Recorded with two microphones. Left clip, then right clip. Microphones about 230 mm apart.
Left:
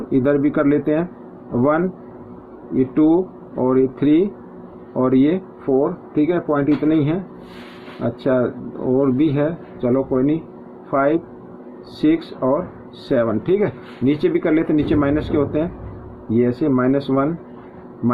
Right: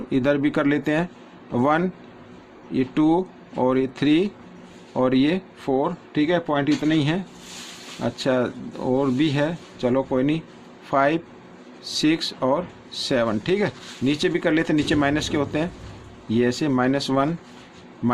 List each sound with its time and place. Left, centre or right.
0.1 s speech: right